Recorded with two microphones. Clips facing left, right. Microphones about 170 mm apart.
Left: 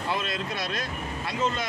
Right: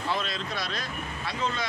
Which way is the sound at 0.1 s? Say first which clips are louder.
Left 1 dB; 50° left (ahead or behind).